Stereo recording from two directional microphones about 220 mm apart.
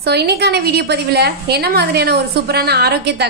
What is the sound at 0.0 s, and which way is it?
A woman's voice, 45° right (ahead or behind).